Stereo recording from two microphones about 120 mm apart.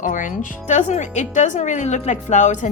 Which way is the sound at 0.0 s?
90° left.